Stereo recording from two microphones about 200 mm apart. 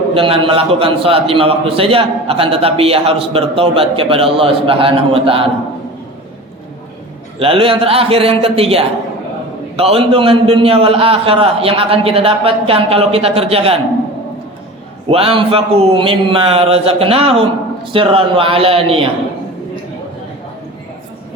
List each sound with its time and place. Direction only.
0.1 s a man's voice: 25° right (ahead or behind)
7.3 s a man's voice: 25° right (ahead or behind)
15.0 s a man's voice: 25° right (ahead or behind)